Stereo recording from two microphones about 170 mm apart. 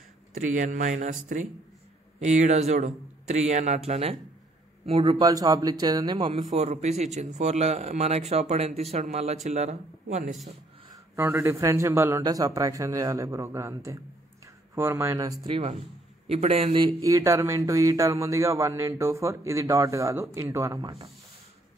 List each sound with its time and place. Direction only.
0.3 s speech: 50° right (ahead or behind)
2.1 s speech: 45° right (ahead or behind); by 6.3 s 30° right (ahead or behind)
6.5 s speech: 40° right (ahead or behind)
10.9 s speech: 15° right (ahead or behind); by 16.9 s 35° right (ahead or behind)
17.0 s speech: 20° right (ahead or behind)